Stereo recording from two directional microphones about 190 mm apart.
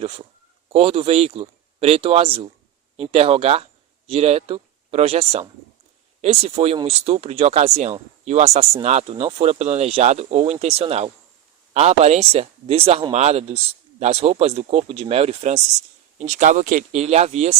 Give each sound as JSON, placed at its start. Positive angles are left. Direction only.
{"t": 0.0, "sound": "speech", "side_deg": -30}